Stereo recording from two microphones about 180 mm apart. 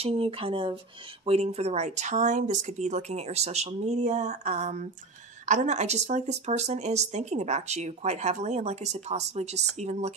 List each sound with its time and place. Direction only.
0.0 s speech: 35° right (ahead or behind)